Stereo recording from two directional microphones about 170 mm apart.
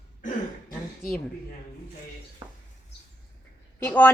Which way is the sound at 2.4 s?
25° right (ahead or behind).